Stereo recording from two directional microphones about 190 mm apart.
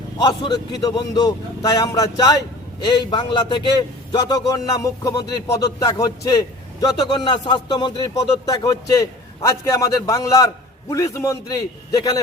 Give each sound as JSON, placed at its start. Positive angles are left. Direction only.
{"t": 0.2, "sound": "a man's voice", "side_deg": 20}